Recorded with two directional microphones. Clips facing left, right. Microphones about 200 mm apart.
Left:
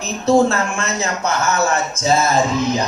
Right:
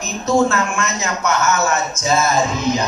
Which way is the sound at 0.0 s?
30° left (ahead or behind).